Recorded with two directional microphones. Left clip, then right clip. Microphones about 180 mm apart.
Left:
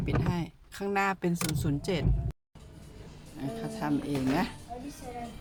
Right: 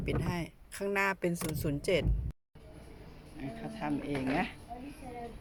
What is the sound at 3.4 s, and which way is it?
Speech, 20° left (ahead or behind).